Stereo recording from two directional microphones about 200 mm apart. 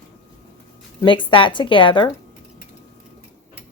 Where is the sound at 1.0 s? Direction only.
25° left (ahead or behind).